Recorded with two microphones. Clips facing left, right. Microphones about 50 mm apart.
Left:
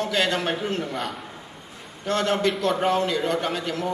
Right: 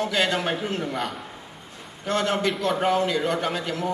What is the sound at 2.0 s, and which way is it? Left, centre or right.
Speech, centre.